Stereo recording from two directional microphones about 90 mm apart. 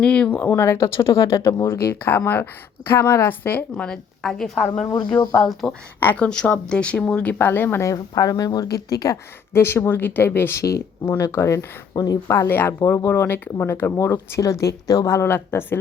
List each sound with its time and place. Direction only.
0.0 s speech: 10° left (ahead or behind)
0.3 s speech: 25° left (ahead or behind)
3.8 s speech: 5° left (ahead or behind)
6.0 s speech: 15° left (ahead or behind)
7.9 s speech: 40° left (ahead or behind)
9.5 s speech: 25° left (ahead or behind)
11.9 s speech: 45° left (ahead or behind); by 15.8 s 25° left (ahead or behind)